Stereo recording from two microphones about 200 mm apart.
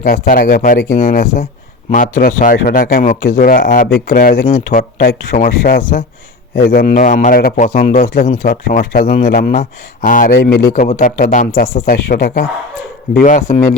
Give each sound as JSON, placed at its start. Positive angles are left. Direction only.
{"t": 0.0, "sound": "speech", "side_deg": 45}